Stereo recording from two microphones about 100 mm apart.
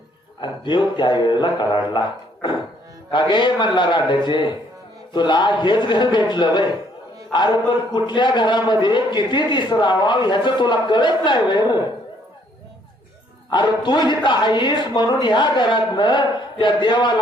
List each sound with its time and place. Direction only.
0.4 s a man's voice: 50° left (ahead or behind)
13.5 s a man's voice: 50° left (ahead or behind)